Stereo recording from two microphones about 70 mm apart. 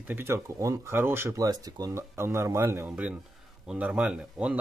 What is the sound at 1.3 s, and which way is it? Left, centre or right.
Speech, right.